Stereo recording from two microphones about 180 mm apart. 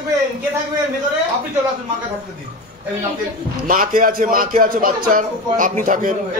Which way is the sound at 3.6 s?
50° right (ahead or behind).